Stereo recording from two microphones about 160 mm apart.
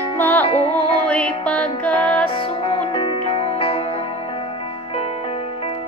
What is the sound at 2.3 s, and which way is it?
Music, 40° left (ahead or behind).